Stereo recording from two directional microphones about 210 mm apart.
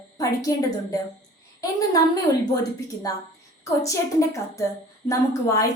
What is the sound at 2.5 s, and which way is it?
A woman's voice, 15° left (ahead or behind).